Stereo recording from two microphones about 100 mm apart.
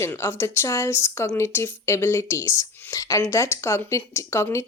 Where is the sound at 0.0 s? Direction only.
25° left (ahead or behind).